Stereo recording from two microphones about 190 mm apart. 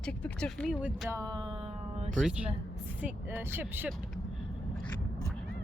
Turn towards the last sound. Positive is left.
turn(degrees=-10)  # may be behind; listen again after turning